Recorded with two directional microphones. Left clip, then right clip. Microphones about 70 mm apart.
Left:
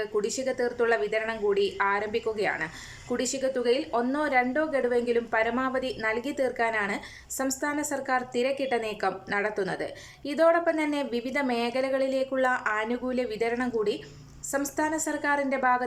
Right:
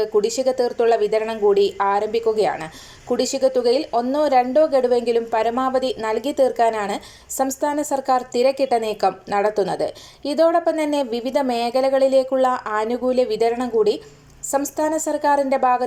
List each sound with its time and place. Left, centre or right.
0.0 s speech: right